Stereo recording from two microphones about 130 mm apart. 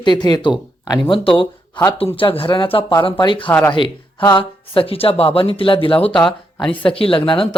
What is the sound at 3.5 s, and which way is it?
Speech, 15° left (ahead or behind).